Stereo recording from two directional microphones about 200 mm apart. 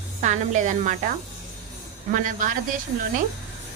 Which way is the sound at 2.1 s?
40° right (ahead or behind).